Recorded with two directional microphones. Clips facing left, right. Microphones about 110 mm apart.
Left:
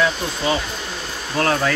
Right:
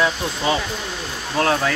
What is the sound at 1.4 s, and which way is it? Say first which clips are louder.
Speech: even; 10° right (ahead or behind).